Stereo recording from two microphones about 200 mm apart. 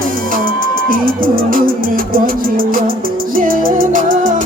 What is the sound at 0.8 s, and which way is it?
Music, 45° right (ahead or behind).